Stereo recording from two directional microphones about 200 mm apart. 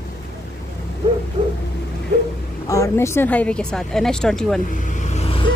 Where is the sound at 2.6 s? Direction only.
15° left (ahead or behind).